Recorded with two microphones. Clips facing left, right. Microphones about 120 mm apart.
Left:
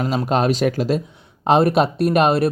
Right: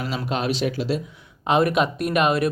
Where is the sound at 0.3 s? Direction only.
40° left (ahead or behind).